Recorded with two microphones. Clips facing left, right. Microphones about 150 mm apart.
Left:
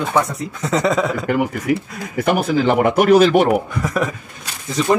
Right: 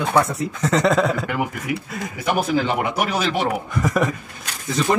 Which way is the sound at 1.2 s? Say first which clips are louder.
Left 6 dB; 50° left (ahead or behind).